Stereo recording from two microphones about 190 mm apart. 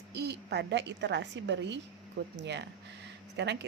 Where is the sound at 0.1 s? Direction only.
60° right (ahead or behind).